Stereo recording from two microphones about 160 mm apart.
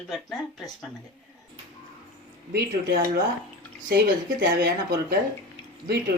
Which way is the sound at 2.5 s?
90° right.